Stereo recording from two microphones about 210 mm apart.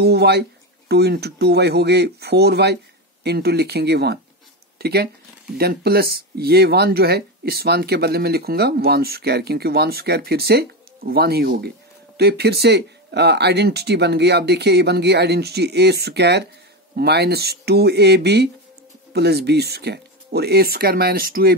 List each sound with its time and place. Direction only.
0.0 s speech: 50° right (ahead or behind)